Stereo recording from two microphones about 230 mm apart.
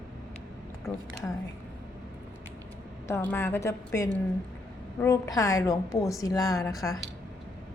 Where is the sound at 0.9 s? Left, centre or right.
Centre.